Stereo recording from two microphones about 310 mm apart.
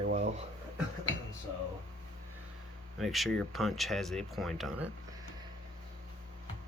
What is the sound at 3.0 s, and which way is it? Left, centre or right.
Speech, centre.